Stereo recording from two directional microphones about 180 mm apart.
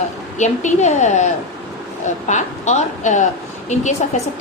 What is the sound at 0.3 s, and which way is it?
A woman's voice, 40° left (ahead or behind).